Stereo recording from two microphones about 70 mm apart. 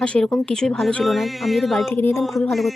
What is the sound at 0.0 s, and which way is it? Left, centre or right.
Speech, centre.